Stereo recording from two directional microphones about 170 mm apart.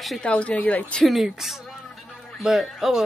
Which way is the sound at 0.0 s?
5° left (ahead or behind).